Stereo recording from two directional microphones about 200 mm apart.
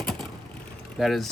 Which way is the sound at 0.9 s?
Centre (ahead or behind).